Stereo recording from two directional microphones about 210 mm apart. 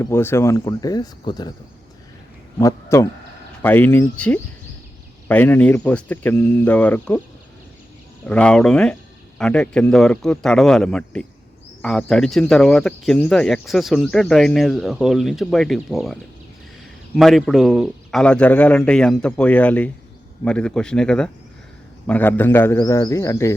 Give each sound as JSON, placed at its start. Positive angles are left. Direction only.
{"t": 0.0, "sound": "speech", "side_deg": 10}
{"t": 2.6, "sound": "speech", "side_deg": 15}
{"t": 8.3, "sound": "speech", "side_deg": 5}
{"t": 17.2, "sound": "speech", "side_deg": 0}